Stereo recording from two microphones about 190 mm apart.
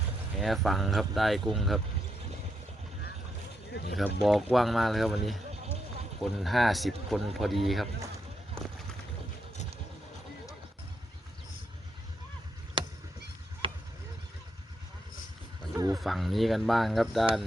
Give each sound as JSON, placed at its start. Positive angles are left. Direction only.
{"t": 0.3, "sound": "speech", "side_deg": 0}
{"t": 3.7, "sound": "speech", "side_deg": 65}
{"t": 3.9, "sound": "speech", "side_deg": 0}
{"t": 15.9, "sound": "speech", "side_deg": 0}